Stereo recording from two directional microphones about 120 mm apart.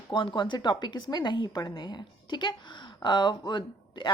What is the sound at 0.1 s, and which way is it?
A woman's voice, 45° left (ahead or behind).